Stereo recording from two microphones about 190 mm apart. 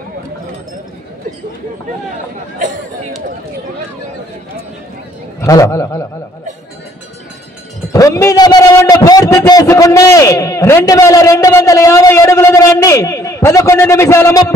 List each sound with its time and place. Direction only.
5.4 s a man's voice: 15° left (ahead or behind)
7.9 s a man's voice: 15° left (ahead or behind)